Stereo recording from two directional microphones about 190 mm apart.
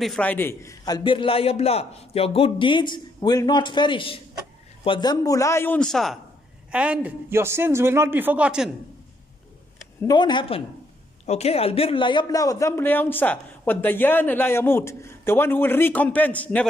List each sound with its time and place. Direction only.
0.0 s a man's voice: 5° left (ahead or behind)
10.0 s a man's voice: 20° left (ahead or behind)